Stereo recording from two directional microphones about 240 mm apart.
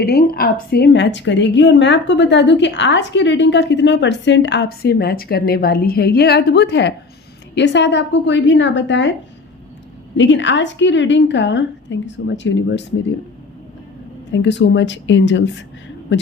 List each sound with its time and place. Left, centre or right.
0.0 s a woman's voice: left
10.2 s a woman's voice: left
14.3 s a woman's voice: left